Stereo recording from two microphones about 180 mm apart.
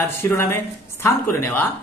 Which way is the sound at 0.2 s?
15° left (ahead or behind).